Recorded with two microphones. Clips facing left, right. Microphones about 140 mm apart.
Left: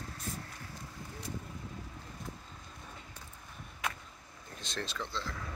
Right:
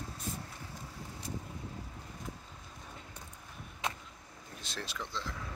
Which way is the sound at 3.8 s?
25° right (ahead or behind).